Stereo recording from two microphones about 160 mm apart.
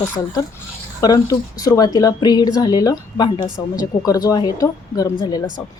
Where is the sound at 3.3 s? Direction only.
10° right (ahead or behind).